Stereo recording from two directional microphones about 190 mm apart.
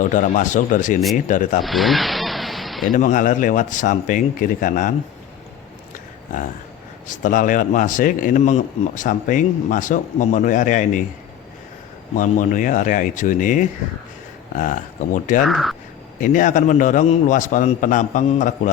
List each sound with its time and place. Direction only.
0.0 s a man's voice: 40° left (ahead or behind)
1.6 s a sound: centre (ahead or behind)
2.9 s a man's voice: 40° left (ahead or behind)
6.3 s a man's voice: 45° left (ahead or behind)
12.1 s a man's voice: 45° left (ahead or behind)
15.4 s speech: centre (ahead or behind)
16.2 s a man's voice: 40° left (ahead or behind)